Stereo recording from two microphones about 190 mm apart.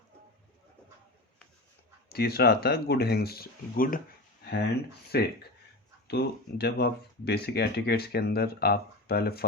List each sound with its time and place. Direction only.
2.0 s speech: 55° left (ahead or behind)
5.1 s speech: 55° left (ahead or behind)